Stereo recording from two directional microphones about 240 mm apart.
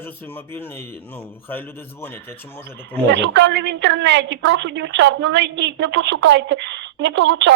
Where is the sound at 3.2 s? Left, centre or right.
Right.